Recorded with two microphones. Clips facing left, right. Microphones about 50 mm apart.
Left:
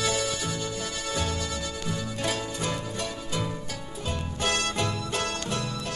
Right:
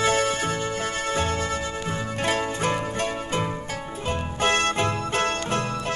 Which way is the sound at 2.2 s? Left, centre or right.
Right.